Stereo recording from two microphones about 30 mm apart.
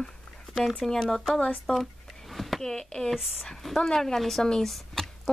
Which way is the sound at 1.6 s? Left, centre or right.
Centre.